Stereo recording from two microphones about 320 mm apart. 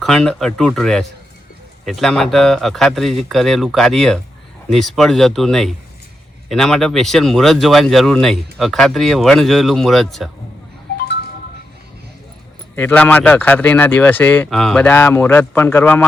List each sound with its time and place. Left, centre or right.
0.0 s speech: centre
12.7 s speech: centre